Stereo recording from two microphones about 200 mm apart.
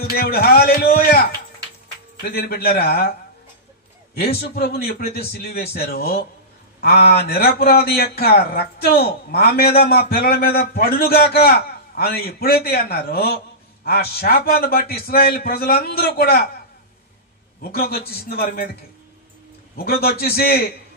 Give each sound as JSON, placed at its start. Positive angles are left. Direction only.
{"t": 0.1, "sound": "a man's voice", "side_deg": 50}
{"t": 4.4, "sound": "a man's voice", "side_deg": 50}
{"t": 17.6, "sound": "a man's voice", "side_deg": 50}
{"t": 19.8, "sound": "a man's voice", "side_deg": 50}